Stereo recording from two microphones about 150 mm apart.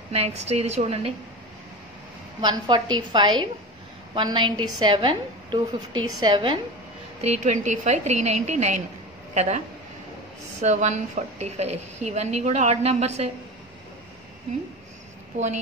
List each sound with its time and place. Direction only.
0.1 s a woman's voice: 45° right (ahead or behind)
2.4 s a woman's voice: 30° right (ahead or behind)
7.2 s a woman's voice: 50° right (ahead or behind)
10.6 s a woman's voice: 50° right (ahead or behind)
15.3 s a woman's voice: 50° right (ahead or behind)